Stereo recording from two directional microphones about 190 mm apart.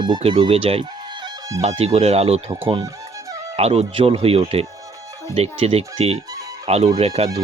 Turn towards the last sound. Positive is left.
turn(degrees=-35)  # may be behind; listen again after turning